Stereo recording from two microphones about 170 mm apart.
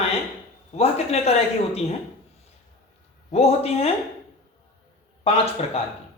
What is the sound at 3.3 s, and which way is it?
Speech, 35° left (ahead or behind).